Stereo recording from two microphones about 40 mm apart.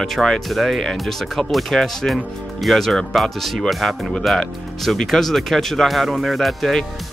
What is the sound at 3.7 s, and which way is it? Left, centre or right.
Speech, centre.